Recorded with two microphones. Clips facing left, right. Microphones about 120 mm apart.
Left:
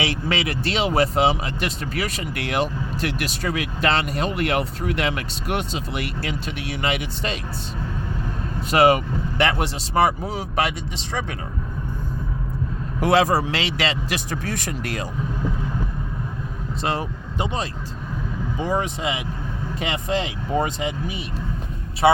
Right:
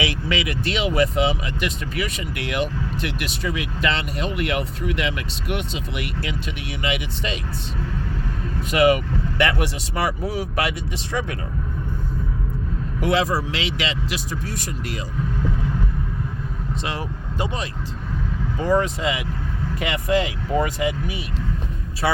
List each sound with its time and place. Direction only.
0.0 s speech: 30° left (ahead or behind)
8.7 s speech: 35° left (ahead or behind)
13.0 s speech: 45° left (ahead or behind)
14.3 s speech: 75° left (ahead or behind)
16.8 s speech: 35° left (ahead or behind)